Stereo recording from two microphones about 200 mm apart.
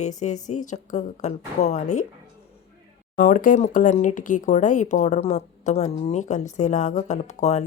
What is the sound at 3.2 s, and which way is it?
Speech, 40° left (ahead or behind).